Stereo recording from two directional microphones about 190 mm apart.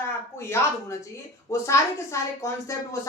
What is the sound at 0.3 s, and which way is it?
A woman's voice, 15° left (ahead or behind).